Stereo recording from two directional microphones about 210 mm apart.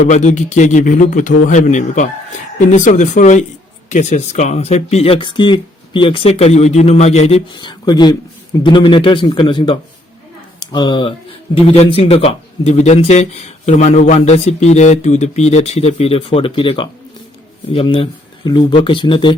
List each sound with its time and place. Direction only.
0.0 s a man's voice: 35° left (ahead or behind)